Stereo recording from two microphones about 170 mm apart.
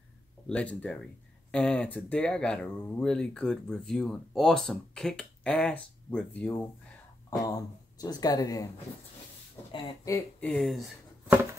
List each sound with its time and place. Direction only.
0.5 s speech: 5° left (ahead or behind)
7.2 s speech: 20° left (ahead or behind)
9.7 s speech: 25° left (ahead or behind)
10.4 s speech: centre (ahead or behind)